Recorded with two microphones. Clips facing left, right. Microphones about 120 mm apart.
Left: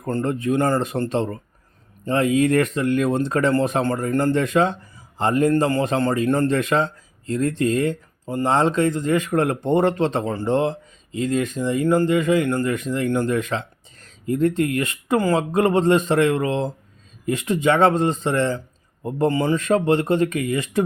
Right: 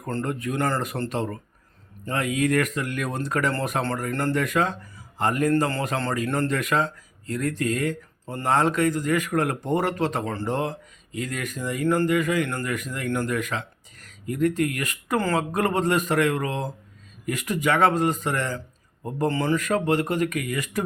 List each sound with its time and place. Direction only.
0.0 s speech: 25° left (ahead or behind)